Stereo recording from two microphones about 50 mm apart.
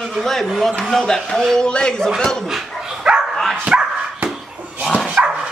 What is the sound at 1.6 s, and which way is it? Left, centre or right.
Speech, centre.